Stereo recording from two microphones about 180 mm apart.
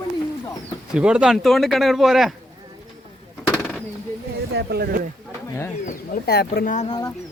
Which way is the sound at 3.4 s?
5° left (ahead or behind).